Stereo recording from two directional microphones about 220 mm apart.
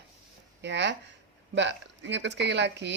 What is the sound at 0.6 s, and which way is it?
Speech, 50° right (ahead or behind).